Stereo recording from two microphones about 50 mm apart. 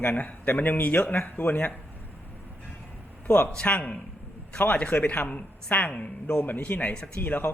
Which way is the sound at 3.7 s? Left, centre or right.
Left.